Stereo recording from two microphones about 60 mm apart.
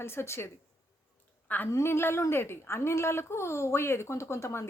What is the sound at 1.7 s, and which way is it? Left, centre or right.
A woman's voice, left.